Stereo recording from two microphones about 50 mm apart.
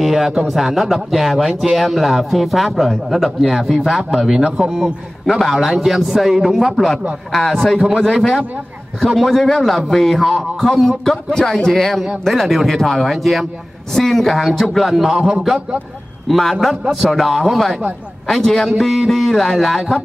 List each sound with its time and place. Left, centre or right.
0.0 s a man's voice: centre
7.3 s a man's voice: centre
9.2 s speech: centre
15.1 s a man's voice: centre
16.3 s speech: centre